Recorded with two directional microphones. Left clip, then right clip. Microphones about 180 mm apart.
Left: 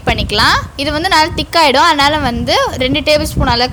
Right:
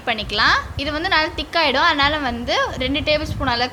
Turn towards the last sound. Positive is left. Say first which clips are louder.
# left 7 dB
turn(degrees=50)  # may be behind; listen again after turning